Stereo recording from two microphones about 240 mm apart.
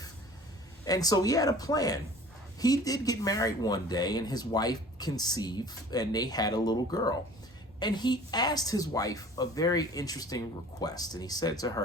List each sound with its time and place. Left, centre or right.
0.9 s speech: centre